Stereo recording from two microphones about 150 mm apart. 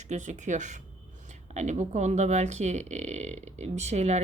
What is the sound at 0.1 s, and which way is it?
A woman's voice, 55° right (ahead or behind).